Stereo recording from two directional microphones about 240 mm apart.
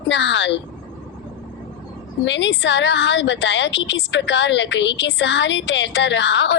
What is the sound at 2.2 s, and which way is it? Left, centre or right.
A woman's voice, left.